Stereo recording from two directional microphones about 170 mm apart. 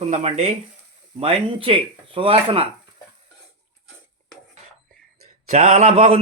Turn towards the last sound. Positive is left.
turn(degrees=-40)  # may be behind; listen again after turning